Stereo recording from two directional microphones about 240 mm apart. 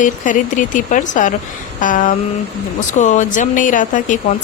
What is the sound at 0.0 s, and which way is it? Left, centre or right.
Speech, left.